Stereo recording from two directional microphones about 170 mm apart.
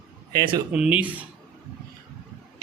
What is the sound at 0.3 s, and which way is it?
Speech, 25° right (ahead or behind).